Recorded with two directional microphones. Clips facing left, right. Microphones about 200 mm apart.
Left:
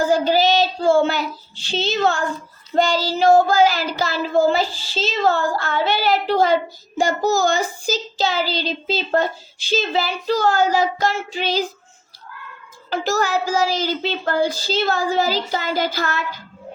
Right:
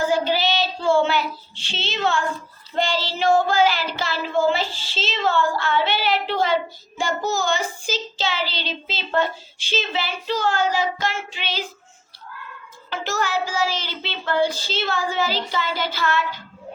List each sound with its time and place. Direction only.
0.0 s child singing: 40° left (ahead or behind)
12.9 s child singing: 40° left (ahead or behind)